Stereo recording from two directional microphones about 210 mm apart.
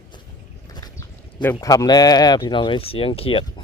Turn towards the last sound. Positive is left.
turn(degrees=25)  # may be behind; listen again after turning